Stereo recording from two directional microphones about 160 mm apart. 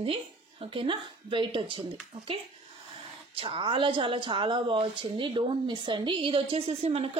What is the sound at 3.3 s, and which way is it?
A woman's voice, 35° right (ahead or behind).